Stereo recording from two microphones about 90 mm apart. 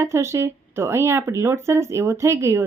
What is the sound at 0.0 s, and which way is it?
Speech, 30° right (ahead or behind).